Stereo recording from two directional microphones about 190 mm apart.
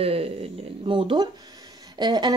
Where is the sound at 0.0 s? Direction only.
30° right (ahead or behind).